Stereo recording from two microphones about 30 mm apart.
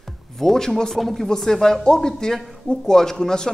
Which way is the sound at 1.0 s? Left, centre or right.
Centre.